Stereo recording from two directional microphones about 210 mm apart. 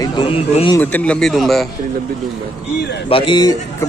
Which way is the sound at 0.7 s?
5° left (ahead or behind).